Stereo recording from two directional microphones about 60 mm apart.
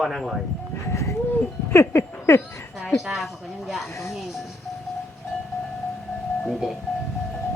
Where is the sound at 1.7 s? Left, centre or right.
Left.